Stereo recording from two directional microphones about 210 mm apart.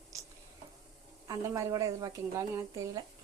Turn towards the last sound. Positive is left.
turn(degrees=-15)  # may be behind; listen again after turning